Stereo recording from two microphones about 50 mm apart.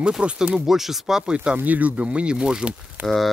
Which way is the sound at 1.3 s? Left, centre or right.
Right.